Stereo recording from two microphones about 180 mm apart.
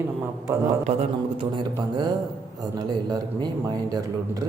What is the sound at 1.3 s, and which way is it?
A man's voice, 25° right (ahead or behind).